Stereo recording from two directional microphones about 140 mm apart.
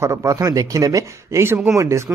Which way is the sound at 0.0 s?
25° right (ahead or behind).